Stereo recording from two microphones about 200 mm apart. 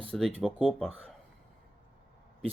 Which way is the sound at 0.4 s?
Centre (ahead or behind).